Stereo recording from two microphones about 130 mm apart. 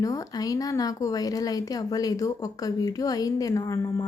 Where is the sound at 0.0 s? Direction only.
25° left (ahead or behind).